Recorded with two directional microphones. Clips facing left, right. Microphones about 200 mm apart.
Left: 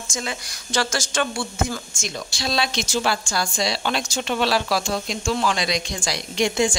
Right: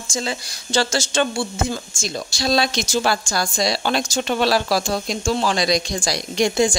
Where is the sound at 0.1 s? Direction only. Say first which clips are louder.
Right 5 dB; 30° right (ahead or behind).